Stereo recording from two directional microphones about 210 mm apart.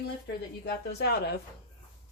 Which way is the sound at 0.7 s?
50° left (ahead or behind).